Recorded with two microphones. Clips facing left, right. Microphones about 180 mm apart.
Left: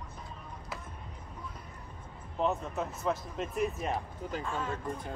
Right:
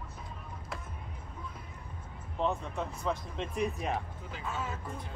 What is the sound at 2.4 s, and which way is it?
Speech, 5° left (ahead or behind).